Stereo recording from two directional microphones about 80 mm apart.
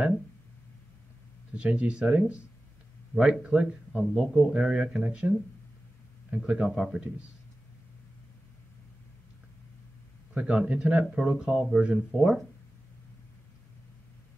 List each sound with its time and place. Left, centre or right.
1.6 s speech: centre
6.3 s speech: centre
6.7 s speech: centre
10.3 s speech: centre